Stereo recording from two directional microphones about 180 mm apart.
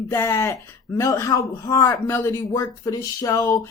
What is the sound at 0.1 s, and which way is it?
Speech, 15° left (ahead or behind).